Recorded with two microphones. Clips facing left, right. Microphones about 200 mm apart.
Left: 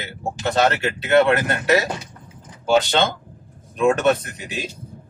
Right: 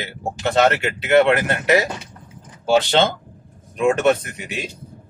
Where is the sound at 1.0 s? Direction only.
20° right (ahead or behind).